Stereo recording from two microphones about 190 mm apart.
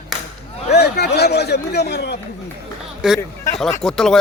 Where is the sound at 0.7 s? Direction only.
60° left (ahead or behind).